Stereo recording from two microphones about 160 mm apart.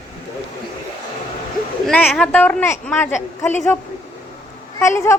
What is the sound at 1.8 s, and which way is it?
Speech, 5° left (ahead or behind).